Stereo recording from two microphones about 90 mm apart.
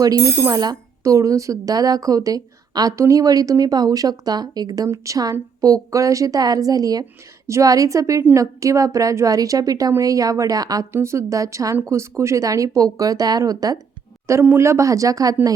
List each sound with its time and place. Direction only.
0.5 s speech: 45° right (ahead or behind)
14.5 s speech: 30° right (ahead or behind)